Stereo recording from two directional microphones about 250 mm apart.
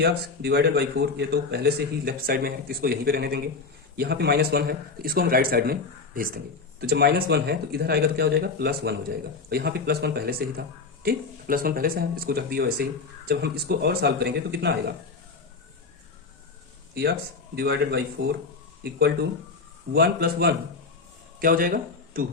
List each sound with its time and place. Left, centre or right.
0.0 s a man's voice: right
16.9 s a man's voice: right